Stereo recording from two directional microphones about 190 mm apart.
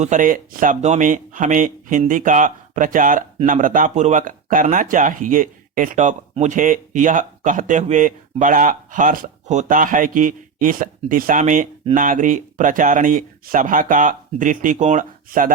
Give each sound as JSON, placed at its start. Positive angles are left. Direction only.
{"t": 0.0, "sound": "speech", "side_deg": -40}